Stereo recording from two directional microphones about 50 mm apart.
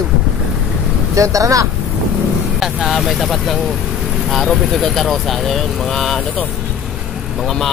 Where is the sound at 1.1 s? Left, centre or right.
Right.